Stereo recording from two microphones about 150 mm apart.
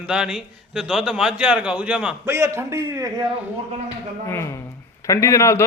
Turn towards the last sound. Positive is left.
turn(degrees=20)  # may be behind; listen again after turning